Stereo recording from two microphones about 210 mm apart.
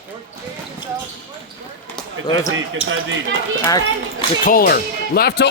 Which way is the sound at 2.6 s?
65° right (ahead or behind).